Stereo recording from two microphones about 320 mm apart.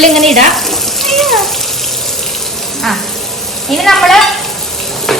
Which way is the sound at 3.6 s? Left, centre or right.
Centre.